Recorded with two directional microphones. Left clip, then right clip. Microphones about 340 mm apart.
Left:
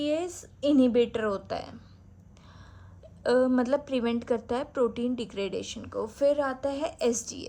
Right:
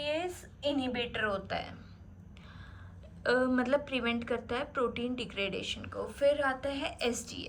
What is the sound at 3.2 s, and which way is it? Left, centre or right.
A woman's voice, centre.